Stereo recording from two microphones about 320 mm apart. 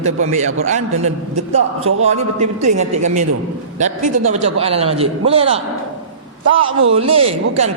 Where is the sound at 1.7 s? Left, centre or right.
Right.